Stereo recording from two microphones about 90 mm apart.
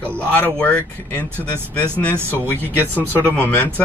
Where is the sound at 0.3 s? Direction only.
15° left (ahead or behind).